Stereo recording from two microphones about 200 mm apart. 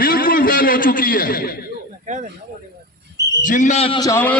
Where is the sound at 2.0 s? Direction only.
40° right (ahead or behind).